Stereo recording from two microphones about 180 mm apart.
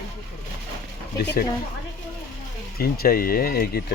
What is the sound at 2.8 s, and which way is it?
Speech, 55° left (ahead or behind).